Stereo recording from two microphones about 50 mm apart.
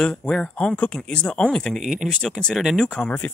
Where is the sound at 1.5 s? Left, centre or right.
Centre.